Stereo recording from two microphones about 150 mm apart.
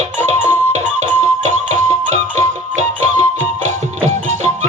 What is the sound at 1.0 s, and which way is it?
Music, 50° right (ahead or behind).